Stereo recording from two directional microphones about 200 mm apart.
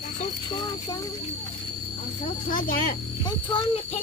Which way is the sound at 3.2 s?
25° left (ahead or behind).